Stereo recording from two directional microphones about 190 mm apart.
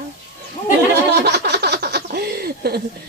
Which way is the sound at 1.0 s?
60° right (ahead or behind).